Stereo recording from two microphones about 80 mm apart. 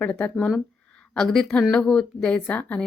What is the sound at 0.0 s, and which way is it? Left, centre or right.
A woman's voice, centre.